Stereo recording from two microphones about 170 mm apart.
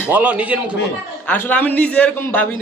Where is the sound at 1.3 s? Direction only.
10° left (ahead or behind).